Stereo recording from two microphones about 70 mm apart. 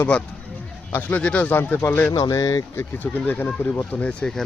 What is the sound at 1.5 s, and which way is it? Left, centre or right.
Speech, left.